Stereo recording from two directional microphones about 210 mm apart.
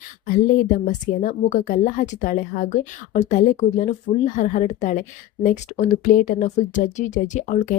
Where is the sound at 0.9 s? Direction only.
40° left (ahead or behind).